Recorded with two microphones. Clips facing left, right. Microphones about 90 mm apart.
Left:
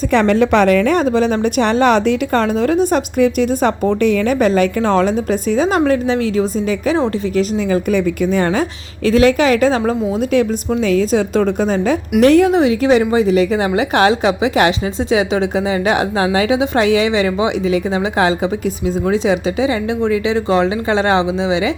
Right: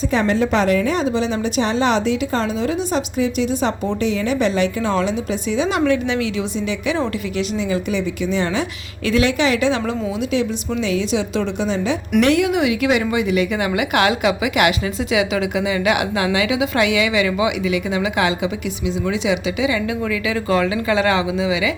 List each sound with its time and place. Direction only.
0.1 s a woman's voice: 65° left (ahead or behind); by 21.7 s 30° left (ahead or behind)